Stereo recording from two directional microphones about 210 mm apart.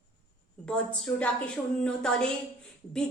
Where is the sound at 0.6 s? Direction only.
5° left (ahead or behind).